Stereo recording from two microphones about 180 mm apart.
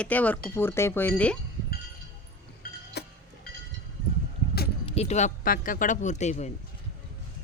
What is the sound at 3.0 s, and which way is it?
Train, 65° left (ahead or behind).